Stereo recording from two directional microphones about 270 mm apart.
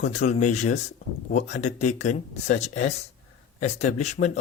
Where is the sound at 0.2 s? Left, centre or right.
Left.